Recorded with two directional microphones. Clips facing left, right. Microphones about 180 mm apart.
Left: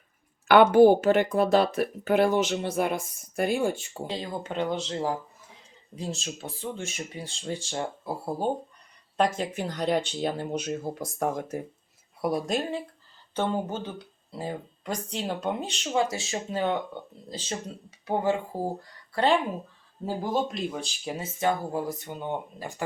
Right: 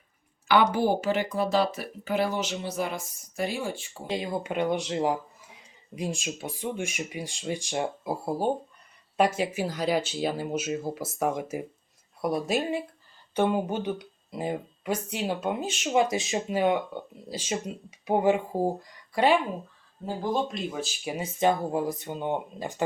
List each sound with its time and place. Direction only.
0.4 s speech: 55° left (ahead or behind)
4.1 s speech: 10° right (ahead or behind)
20.3 s speech: centre (ahead or behind); by 22.8 s 20° right (ahead or behind)